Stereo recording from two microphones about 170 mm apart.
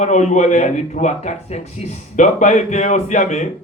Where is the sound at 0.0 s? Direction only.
45° left (ahead or behind).